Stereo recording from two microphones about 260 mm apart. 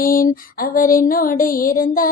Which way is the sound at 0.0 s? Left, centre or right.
Left.